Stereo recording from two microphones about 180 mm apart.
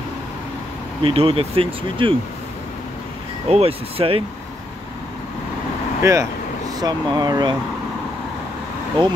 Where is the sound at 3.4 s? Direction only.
35° right (ahead or behind).